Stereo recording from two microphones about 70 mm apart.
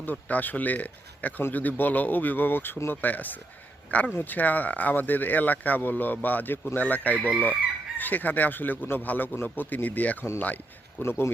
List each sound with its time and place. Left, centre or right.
0.0 s speech: left
7.2 s chicken: centre
7.9 s speech: left
11.0 s speech: left